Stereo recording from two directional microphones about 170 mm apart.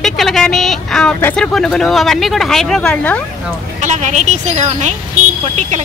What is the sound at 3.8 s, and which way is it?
Speech, 45° right (ahead or behind).